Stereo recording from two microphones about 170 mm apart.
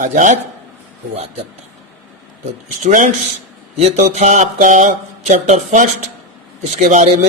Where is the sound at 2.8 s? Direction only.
50° right (ahead or behind).